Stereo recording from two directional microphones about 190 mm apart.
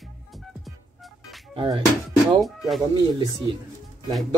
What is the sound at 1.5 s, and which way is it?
Speech, 30° right (ahead or behind).